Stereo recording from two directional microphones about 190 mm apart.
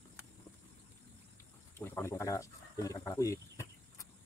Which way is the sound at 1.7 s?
10° left (ahead or behind).